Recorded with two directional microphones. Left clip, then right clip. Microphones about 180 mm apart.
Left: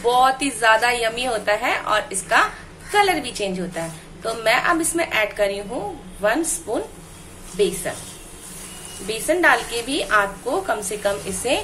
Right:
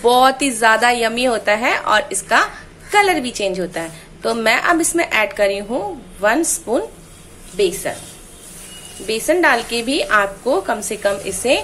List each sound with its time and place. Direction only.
0.0 s a woman's voice: 35° right (ahead or behind)
9.0 s a woman's voice: 30° right (ahead or behind)